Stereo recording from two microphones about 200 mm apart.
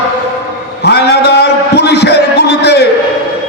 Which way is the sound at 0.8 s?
55° left (ahead or behind).